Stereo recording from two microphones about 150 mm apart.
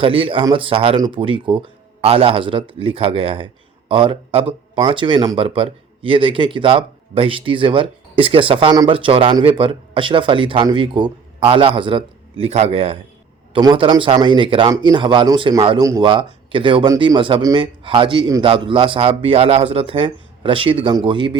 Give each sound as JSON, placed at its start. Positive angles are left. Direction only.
{"t": 0.0, "sound": "speech", "side_deg": -35}
{"t": 15.8, "sound": "speech", "side_deg": -20}
{"t": 16.0, "sound": "speech", "side_deg": -35}